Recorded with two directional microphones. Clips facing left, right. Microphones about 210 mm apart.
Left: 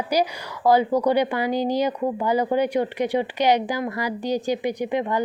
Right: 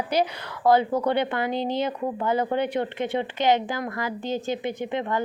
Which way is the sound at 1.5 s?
25° right (ahead or behind).